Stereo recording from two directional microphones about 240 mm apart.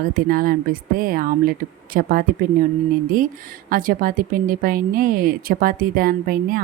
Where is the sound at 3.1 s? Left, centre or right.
Right.